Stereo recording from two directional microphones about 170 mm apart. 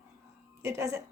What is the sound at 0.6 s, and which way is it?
Speech, 15° right (ahead or behind).